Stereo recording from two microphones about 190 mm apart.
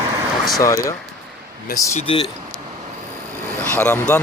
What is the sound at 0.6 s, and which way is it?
Speech, 15° left (ahead or behind).